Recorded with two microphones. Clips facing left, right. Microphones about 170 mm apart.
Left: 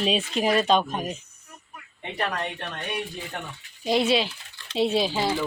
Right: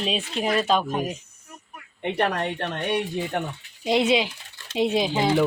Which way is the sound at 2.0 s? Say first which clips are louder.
Right 5 dB; 65° right (ahead or behind).